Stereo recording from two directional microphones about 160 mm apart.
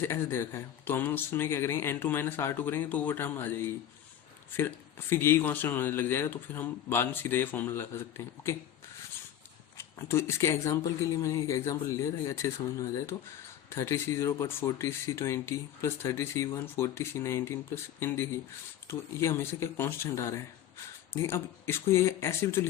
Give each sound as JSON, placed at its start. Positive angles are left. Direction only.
{"t": 0.0, "sound": "speech", "side_deg": 15}
{"t": 9.7, "sound": "speech", "side_deg": 15}